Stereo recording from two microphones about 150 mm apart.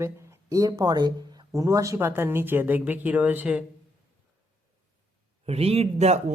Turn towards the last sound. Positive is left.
turn(degrees=-45)  # may be behind; listen again after turning